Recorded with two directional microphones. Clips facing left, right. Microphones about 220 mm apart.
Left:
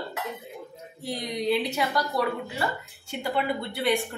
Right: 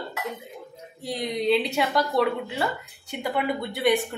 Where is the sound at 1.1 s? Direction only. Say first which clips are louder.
Right 3 dB; 25° right (ahead or behind).